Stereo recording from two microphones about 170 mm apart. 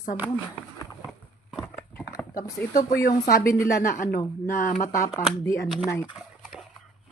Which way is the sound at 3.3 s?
60° left (ahead or behind).